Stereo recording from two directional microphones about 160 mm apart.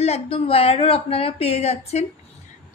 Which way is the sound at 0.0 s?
40° left (ahead or behind).